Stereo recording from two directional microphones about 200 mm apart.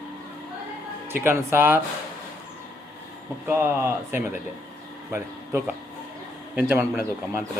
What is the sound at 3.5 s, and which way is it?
Speech, 10° right (ahead or behind).